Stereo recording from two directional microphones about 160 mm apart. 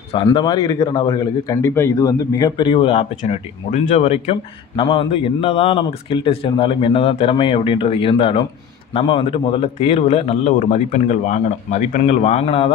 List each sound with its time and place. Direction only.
0.1 s speech: 30° left (ahead or behind)
3.2 s speech: 45° left (ahead or behind)
10.5 s speech: 50° left (ahead or behind)